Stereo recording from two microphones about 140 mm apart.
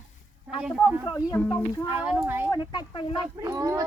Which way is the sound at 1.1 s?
25° left (ahead or behind).